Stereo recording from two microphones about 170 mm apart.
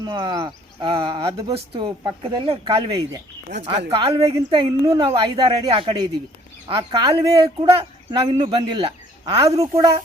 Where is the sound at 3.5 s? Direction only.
90° right.